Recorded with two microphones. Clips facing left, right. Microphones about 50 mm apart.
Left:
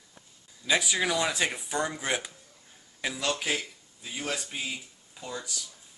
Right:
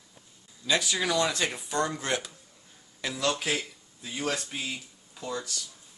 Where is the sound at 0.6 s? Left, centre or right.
Centre.